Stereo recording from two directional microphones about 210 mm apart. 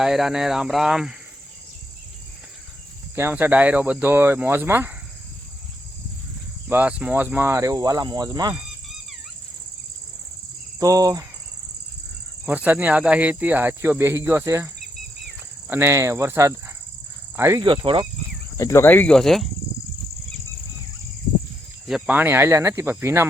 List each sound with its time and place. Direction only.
0.0 s speech: centre (ahead or behind)
3.2 s speech: 10° right (ahead or behind)
6.7 s speech: 10° right (ahead or behind)
10.8 s speech: 15° right (ahead or behind)
12.5 s speech: 10° right (ahead or behind)
17.7 s speech: 25° right (ahead or behind)
18.5 s speech: 15° left (ahead or behind)
21.8 s speech: 5° right (ahead or behind)